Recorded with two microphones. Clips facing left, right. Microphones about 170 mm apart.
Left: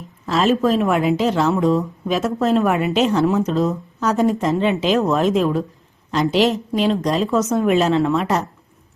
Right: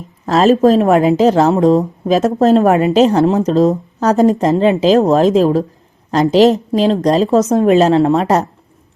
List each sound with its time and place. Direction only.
0.3 s a woman's voice: 40° right (ahead or behind)